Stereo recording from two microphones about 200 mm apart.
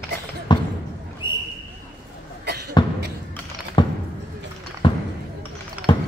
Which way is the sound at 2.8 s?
20° left (ahead or behind).